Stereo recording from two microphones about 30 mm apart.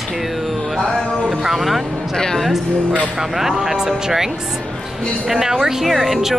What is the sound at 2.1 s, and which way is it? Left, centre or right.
Speech, centre.